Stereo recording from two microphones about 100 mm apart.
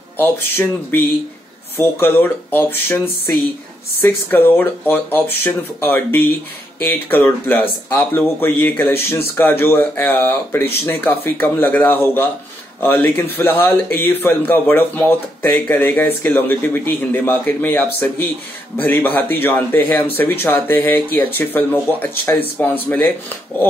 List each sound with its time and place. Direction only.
0.2 s speech: 20° left (ahead or behind)
4.0 s speech: 20° left (ahead or behind)